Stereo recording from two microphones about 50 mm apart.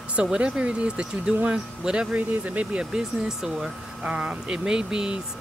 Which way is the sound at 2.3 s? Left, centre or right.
Right.